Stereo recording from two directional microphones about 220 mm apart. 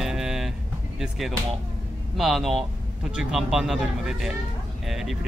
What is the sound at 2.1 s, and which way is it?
A man's voice, centre (ahead or behind).